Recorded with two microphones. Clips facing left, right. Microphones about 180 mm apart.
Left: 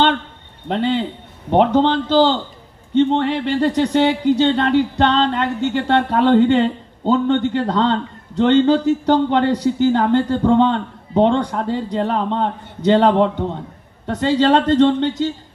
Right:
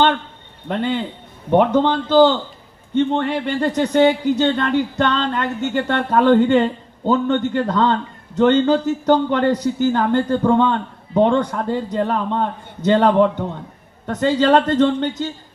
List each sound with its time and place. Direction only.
0.7 s a man's voice: 50° right (ahead or behind)